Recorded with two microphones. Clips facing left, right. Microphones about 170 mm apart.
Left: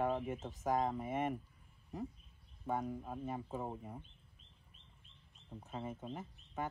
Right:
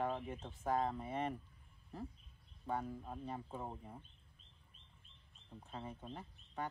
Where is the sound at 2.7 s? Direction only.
15° left (ahead or behind).